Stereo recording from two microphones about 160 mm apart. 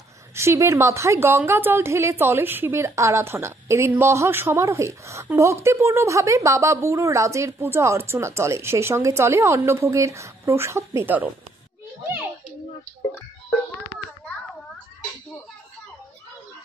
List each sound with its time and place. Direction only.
0.3 s a woman's voice: 15° right (ahead or behind)